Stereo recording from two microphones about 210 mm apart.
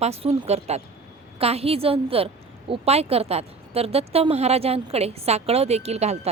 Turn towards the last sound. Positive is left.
turn(degrees=-30)  # may be behind; listen again after turning